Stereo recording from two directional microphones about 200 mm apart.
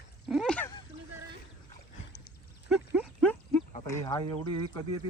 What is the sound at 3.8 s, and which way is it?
Speech, 15° left (ahead or behind).